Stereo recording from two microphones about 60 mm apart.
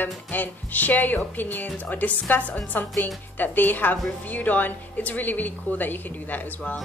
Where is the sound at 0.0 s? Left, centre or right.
Left.